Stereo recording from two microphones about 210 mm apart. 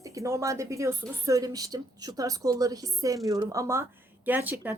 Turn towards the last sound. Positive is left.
turn(degrees=-10)  # may be behind; listen again after turning